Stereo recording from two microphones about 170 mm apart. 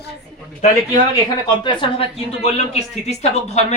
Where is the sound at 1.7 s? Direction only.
35° left (ahead or behind).